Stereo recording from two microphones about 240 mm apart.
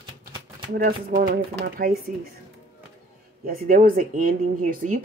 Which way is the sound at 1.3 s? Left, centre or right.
Right.